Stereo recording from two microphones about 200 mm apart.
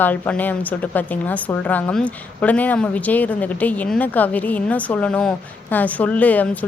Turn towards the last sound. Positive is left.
turn(degrees=10)  # may be behind; listen again after turning